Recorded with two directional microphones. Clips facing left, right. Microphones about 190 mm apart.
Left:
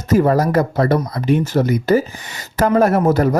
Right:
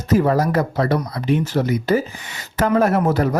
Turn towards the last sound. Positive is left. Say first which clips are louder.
# left 3 dB
turn(degrees=45)  # may be behind; listen again after turning